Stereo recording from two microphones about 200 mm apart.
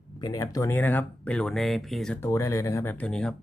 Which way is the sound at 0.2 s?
20° left (ahead or behind).